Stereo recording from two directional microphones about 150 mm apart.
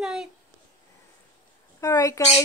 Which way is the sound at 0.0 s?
5° right (ahead or behind).